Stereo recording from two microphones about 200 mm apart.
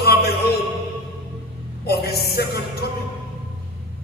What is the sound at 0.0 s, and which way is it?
Music, 55° left (ahead or behind).